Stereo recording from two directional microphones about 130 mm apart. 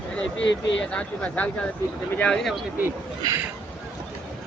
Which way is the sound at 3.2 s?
30° right (ahead or behind).